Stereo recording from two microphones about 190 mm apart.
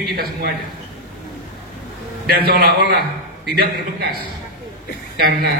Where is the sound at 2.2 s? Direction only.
55° right (ahead or behind).